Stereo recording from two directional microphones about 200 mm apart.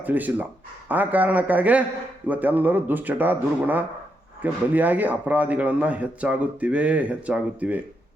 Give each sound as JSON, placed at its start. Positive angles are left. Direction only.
{"t": 0.0, "sound": "speech", "side_deg": -10}